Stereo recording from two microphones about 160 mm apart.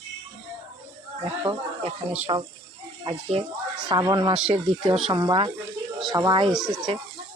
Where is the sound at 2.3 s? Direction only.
35° right (ahead or behind).